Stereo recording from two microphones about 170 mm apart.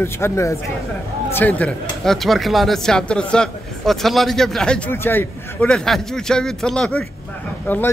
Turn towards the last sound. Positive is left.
turn(degrees=10)  # may be behind; listen again after turning